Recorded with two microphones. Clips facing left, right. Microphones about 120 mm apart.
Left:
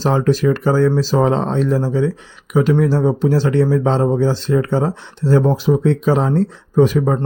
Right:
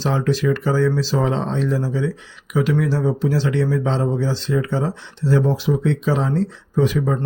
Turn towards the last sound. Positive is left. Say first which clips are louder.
# left 5 dB
turn(degrees=40)  # may be behind; listen again after turning